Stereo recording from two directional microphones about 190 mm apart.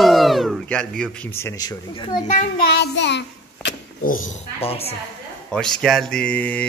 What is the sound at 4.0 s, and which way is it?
Speech, 45° left (ahead or behind).